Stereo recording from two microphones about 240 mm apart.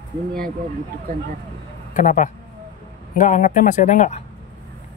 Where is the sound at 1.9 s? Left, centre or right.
Left.